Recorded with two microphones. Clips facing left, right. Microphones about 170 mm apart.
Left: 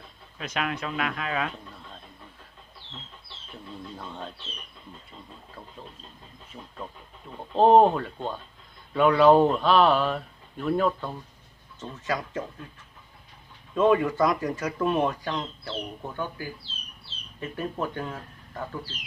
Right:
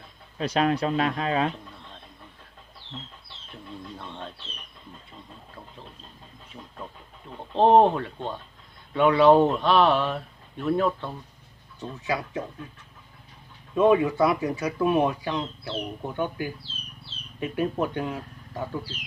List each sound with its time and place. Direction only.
0.3 s speech: 35° right (ahead or behind)
3.9 s speech: 5° left (ahead or behind)
7.5 s speech: 5° left (ahead or behind)
13.7 s speech: 10° right (ahead or behind)
16.1 s speech: 20° right (ahead or behind)